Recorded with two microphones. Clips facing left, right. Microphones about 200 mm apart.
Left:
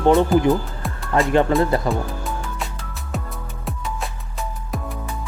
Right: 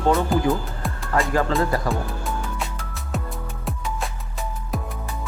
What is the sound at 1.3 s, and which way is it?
Speech, 20° left (ahead or behind).